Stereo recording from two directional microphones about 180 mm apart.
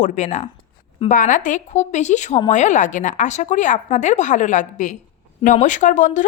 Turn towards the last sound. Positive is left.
turn(degrees=45)  # may be behind; listen again after turning